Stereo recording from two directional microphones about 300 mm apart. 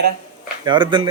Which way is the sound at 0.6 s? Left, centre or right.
Centre.